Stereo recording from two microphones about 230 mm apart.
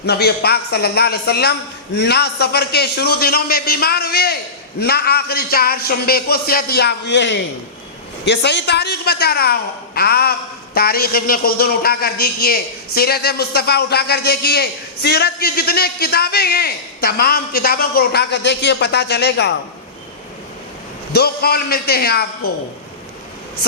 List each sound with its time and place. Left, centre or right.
0.0 s a man's voice: left
21.1 s a man's voice: left